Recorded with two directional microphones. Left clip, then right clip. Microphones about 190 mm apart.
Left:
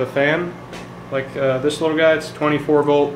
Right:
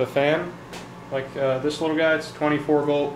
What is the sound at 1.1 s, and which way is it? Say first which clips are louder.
Speech: left 4 dB; 15° left (ahead or behind).